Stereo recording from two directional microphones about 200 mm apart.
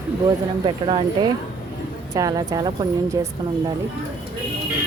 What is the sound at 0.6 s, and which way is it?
Speech, 25° right (ahead or behind).